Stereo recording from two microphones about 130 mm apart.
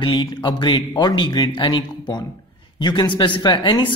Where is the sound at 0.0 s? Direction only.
35° left (ahead or behind).